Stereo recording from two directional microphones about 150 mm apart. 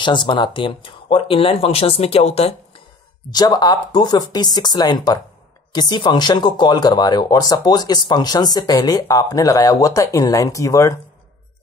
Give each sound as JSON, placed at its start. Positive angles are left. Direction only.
{"t": 0.0, "sound": "speech", "side_deg": 30}
{"t": 3.3, "sound": "speech", "side_deg": 25}